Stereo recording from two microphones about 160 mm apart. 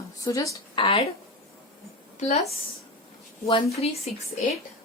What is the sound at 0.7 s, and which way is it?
Speech, 35° left (ahead or behind).